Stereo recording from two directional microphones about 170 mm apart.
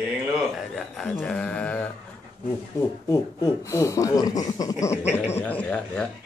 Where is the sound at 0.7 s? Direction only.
Centre (ahead or behind).